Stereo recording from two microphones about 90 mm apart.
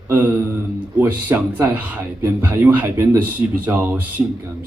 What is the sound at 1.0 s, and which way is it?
A woman's voice, 20° right (ahead or behind).